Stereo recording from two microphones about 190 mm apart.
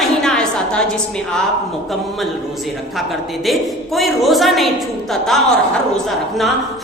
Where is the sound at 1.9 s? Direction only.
Centre (ahead or behind).